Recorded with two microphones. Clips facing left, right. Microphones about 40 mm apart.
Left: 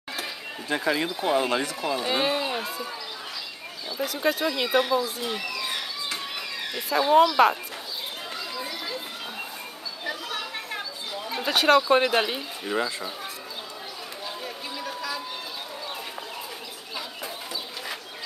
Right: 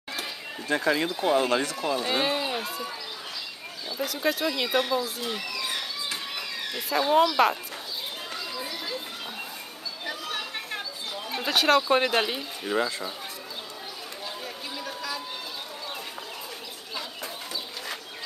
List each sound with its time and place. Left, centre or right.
0.7 s speech: centre
4.0 s speech: centre
8.5 s run: centre
10.0 s chatter: centre
11.2 s speech: centre
14.4 s a sound: centre